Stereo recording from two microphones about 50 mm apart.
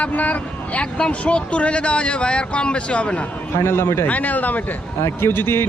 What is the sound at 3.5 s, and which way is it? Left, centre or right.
Speech, left.